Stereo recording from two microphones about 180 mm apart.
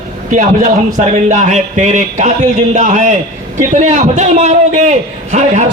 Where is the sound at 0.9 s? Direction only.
40° right (ahead or behind).